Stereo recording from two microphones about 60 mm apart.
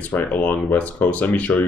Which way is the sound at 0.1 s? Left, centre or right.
Left.